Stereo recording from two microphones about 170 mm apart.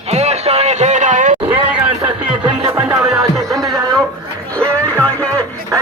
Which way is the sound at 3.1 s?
5° right (ahead or behind).